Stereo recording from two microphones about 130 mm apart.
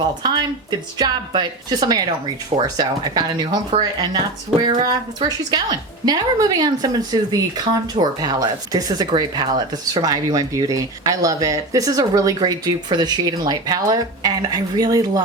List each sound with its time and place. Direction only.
0.0 s speech: 35° right (ahead or behind)